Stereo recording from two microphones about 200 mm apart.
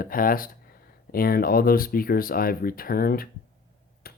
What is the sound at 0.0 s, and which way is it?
Speech, 45° left (ahead or behind).